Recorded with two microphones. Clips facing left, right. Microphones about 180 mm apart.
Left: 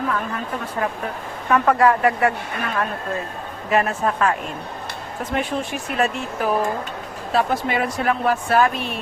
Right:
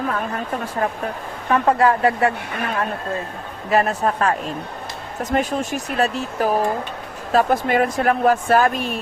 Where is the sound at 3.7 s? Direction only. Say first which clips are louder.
Right 2 dB; 40° right (ahead or behind).